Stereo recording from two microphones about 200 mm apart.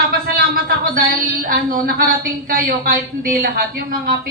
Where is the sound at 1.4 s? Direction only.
45° right (ahead or behind).